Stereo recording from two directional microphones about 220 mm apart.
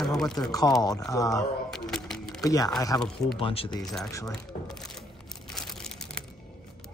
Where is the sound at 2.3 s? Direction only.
15° left (ahead or behind).